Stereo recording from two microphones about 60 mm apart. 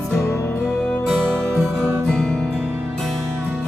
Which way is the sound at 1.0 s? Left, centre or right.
Centre.